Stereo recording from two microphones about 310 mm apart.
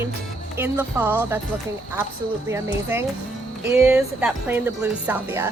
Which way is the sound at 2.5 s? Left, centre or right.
Centre.